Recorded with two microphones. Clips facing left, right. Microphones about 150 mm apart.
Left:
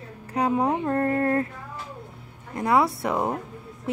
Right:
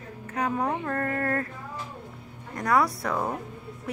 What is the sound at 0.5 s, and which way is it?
Speech, 25° left (ahead or behind).